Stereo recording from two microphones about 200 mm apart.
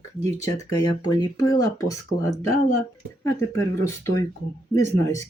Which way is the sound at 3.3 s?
15° left (ahead or behind).